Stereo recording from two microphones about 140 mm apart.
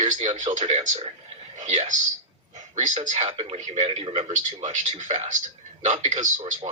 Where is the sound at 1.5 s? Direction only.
55° right (ahead or behind).